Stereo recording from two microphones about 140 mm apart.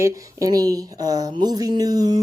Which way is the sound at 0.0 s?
25° right (ahead or behind).